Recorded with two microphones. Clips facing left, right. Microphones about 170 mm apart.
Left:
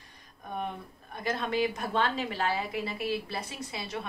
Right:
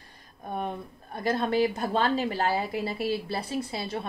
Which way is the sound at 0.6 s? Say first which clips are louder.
Right 3 dB; 35° right (ahead or behind).